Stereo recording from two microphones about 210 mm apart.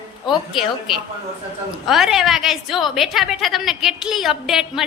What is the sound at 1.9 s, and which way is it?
A woman's voice, centre (ahead or behind).